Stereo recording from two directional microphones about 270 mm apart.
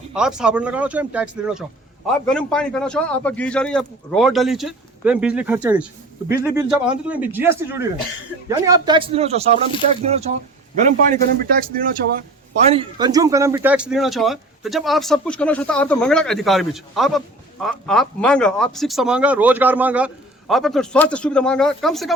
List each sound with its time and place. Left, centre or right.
0.1 s a man's voice: centre